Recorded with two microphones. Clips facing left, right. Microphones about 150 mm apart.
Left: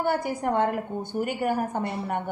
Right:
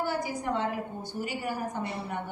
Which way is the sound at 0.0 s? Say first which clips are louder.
Left 5 dB; 60° left (ahead or behind).